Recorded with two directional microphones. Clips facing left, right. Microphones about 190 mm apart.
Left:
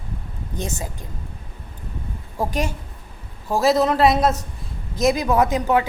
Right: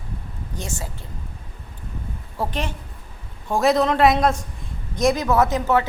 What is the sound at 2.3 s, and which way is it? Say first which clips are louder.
A woman's voice: left 3 dB; 10° left (ahead or behind).